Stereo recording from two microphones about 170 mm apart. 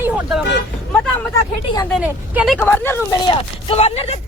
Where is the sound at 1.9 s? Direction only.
5° right (ahead or behind).